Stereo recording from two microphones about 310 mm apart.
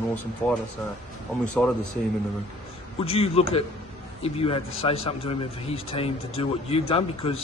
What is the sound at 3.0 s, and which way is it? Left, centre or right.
A man's voice, centre.